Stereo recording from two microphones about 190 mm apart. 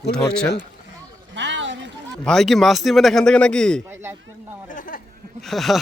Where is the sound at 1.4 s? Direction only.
70° right (ahead or behind).